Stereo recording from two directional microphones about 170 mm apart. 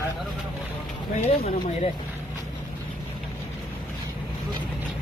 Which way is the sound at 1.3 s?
40° left (ahead or behind).